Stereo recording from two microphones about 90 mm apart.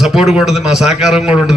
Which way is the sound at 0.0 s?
5° right (ahead or behind).